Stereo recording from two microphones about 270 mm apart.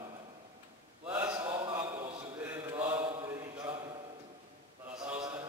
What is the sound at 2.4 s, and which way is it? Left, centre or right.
Mantra, centre.